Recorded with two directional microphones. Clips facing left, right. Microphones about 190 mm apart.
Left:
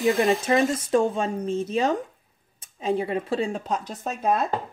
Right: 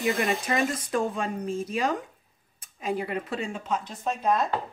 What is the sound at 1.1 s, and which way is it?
Speech, 25° left (ahead or behind).